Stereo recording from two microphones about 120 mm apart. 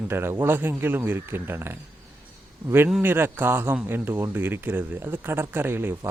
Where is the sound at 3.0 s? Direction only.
15° right (ahead or behind).